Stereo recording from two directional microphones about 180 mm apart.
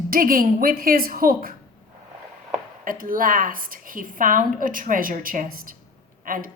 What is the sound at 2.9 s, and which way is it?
Speech, 50° right (ahead or behind).